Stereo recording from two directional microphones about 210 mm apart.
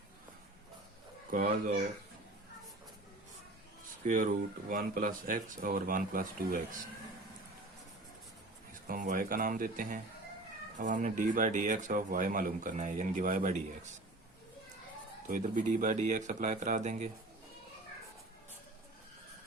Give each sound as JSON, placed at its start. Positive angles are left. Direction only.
{"t": 1.3, "sound": "speech", "side_deg": -40}
{"t": 4.0, "sound": "speech", "side_deg": -40}
{"t": 8.9, "sound": "speech", "side_deg": -40}
{"t": 15.3, "sound": "speech", "side_deg": -35}